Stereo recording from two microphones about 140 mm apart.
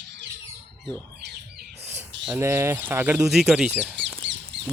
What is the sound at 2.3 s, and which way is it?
Speech, 20° right (ahead or behind).